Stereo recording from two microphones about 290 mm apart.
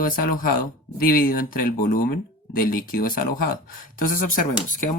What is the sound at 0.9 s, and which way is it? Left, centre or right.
Speech, left.